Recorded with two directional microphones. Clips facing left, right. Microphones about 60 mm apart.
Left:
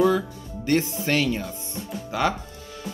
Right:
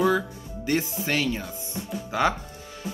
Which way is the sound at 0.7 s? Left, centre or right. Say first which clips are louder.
Left 3 dB; centre.